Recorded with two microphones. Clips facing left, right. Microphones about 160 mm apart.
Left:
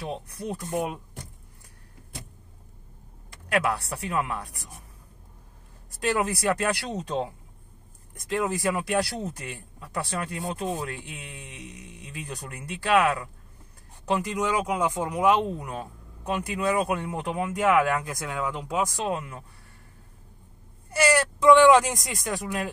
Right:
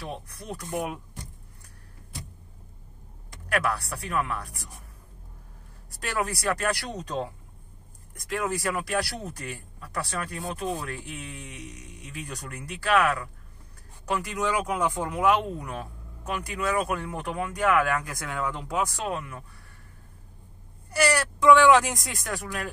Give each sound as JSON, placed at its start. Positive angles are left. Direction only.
{"t": 0.0, "sound": "speech", "side_deg": 20}
{"t": 3.5, "sound": "speech", "side_deg": 20}
{"t": 5.9, "sound": "speech", "side_deg": 20}
{"t": 20.9, "sound": "speech", "side_deg": 20}